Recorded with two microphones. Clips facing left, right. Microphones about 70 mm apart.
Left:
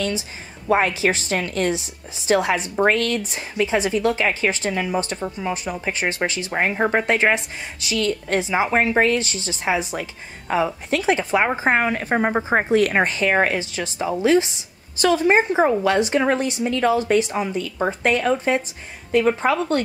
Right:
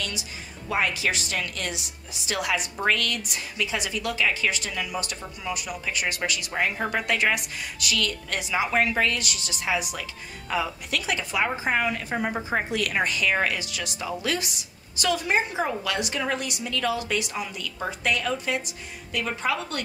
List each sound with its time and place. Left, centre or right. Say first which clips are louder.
0.7 s a woman's voice: left 7 dB; left